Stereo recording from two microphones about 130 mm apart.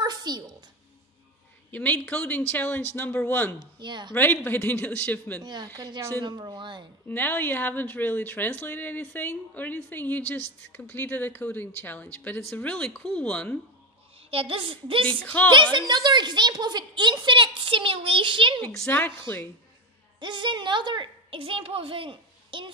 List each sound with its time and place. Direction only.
0.0 s a sound: 30° right (ahead or behind)
1.7 s speech: 10° left (ahead or behind)
3.8 s a woman's voice: 35° right (ahead or behind)
4.1 s speech: 15° left (ahead or behind)
5.4 s a woman's voice: 30° right (ahead or behind)
7.1 s speech: 15° left (ahead or behind)
14.3 s a woman's voice: 45° right (ahead or behind)
15.2 s speech: 15° left (ahead or behind)
15.5 s a woman's voice: 35° right (ahead or behind)
18.9 s speech: 15° left (ahead or behind)
20.2 s a woman's voice: 35° right (ahead or behind)